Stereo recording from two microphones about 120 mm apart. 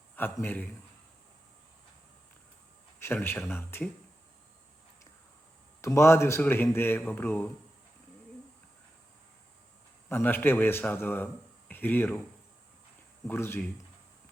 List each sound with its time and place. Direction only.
0.2 s speech: 15° left (ahead or behind)
3.0 s speech: 20° left (ahead or behind)
5.8 s speech: 25° left (ahead or behind)
10.1 s speech: 15° left (ahead or behind)
13.2 s speech: 20° left (ahead or behind)